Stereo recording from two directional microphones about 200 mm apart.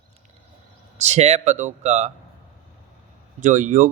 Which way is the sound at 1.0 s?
35° right (ahead or behind).